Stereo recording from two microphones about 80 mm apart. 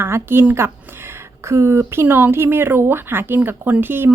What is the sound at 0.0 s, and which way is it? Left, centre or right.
A woman's voice, right.